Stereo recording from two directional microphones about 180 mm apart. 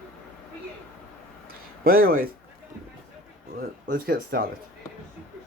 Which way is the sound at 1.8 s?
55° right (ahead or behind).